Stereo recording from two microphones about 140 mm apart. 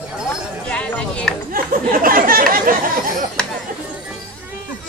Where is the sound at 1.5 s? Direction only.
90° right.